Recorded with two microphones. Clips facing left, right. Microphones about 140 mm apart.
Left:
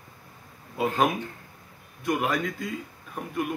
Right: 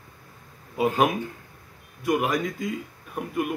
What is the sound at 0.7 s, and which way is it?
A man's voice, 10° right (ahead or behind).